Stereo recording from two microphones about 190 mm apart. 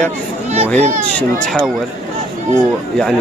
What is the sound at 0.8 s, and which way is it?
Speech, 40° right (ahead or behind).